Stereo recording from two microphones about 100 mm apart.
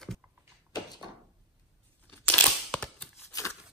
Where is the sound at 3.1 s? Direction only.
30° left (ahead or behind).